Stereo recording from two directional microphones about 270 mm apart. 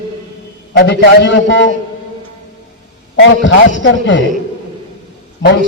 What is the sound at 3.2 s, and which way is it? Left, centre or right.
A man's voice, left.